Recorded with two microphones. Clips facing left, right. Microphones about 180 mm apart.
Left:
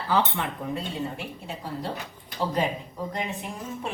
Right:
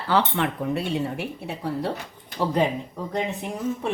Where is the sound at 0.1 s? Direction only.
70° right (ahead or behind).